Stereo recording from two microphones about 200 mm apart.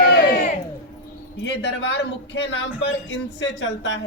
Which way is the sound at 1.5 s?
60° left (ahead or behind).